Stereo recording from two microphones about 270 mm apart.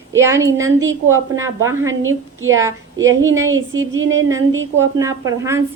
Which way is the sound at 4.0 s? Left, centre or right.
Right.